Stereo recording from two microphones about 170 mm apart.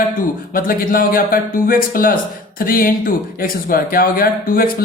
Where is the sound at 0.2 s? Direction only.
55° left (ahead or behind).